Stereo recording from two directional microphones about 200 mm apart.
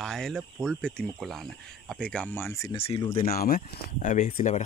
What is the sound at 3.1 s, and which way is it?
Speech, 50° left (ahead or behind).